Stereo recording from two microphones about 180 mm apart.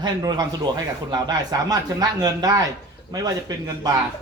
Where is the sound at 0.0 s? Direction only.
20° right (ahead or behind).